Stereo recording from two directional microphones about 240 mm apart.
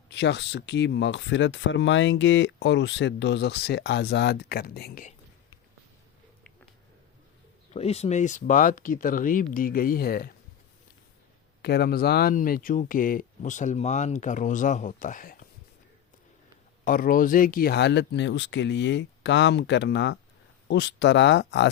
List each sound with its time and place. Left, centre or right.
0.1 s speech: left
7.7 s speech: left
11.6 s speech: left
16.8 s speech: left